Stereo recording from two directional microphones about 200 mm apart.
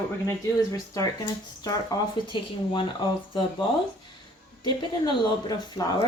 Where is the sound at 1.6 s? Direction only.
20° left (ahead or behind).